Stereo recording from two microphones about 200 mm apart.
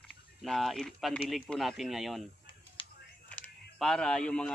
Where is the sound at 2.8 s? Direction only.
25° left (ahead or behind).